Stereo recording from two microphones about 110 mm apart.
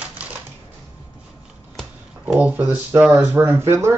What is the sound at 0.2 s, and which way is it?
Typewriter, 10° right (ahead or behind).